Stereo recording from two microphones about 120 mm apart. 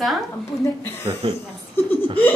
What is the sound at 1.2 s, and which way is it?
Speech, 50° right (ahead or behind).